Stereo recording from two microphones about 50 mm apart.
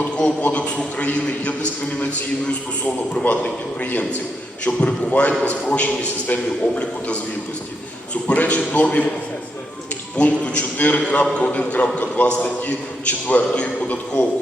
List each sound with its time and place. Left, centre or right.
0.9 s a man's voice: left
3.2 s a man's voice: left
10.2 s a man's voice: left